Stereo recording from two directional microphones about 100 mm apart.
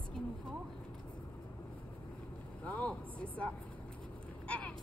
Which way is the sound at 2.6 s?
15° left (ahead or behind).